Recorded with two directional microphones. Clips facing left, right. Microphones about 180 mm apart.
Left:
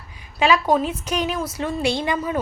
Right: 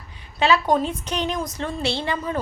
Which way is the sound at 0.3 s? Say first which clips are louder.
Left 1 dB; 10° left (ahead or behind).